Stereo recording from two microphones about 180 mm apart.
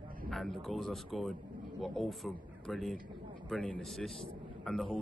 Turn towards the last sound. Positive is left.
turn(degrees=0)  # may be behind; listen again after turning